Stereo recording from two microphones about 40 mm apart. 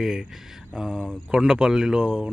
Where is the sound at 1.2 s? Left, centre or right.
Centre.